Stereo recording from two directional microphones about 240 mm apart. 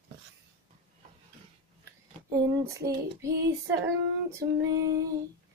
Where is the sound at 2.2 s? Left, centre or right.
Centre.